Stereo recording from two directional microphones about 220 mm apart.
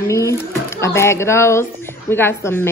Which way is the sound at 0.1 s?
15° left (ahead or behind).